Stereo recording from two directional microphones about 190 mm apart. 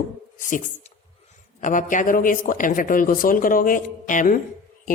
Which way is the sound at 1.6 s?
45° left (ahead or behind).